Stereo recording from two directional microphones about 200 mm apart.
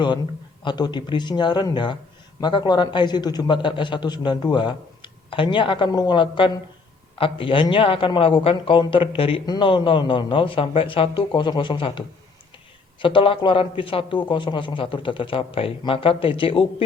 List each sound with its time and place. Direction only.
0.6 s a man's voice: 20° left (ahead or behind)